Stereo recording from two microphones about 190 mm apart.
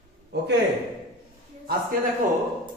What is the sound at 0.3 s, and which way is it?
Speech, 60° right (ahead or behind).